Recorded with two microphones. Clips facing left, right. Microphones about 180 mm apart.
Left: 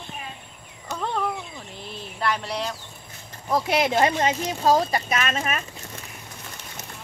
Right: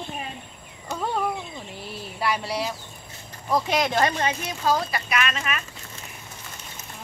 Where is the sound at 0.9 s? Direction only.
10° right (ahead or behind).